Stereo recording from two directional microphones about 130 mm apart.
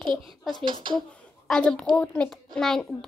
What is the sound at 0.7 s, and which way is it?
Speech, 35° right (ahead or behind).